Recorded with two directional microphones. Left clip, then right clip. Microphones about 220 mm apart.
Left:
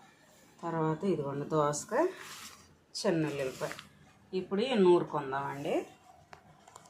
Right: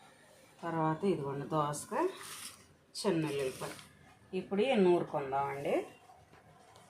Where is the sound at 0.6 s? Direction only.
10° left (ahead or behind).